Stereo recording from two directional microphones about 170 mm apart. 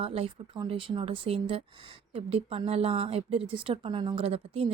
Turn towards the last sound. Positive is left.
turn(degrees=-35)  # may be behind; listen again after turning